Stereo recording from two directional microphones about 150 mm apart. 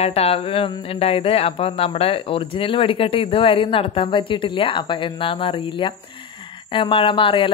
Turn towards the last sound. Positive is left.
turn(degrees=35)  # may be behind; listen again after turning